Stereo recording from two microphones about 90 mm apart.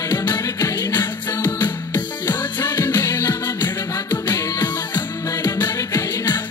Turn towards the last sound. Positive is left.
turn(degrees=50)  # may be behind; listen again after turning